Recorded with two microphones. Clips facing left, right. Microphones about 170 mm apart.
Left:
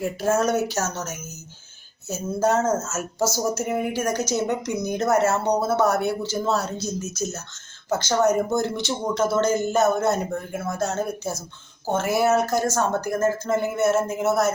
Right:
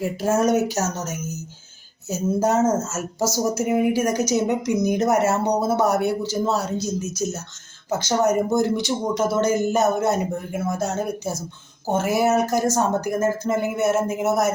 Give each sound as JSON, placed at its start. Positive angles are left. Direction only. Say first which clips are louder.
{"t": 0.0, "sound": "a woman's voice", "louder": "right 1 dB", "side_deg": -10}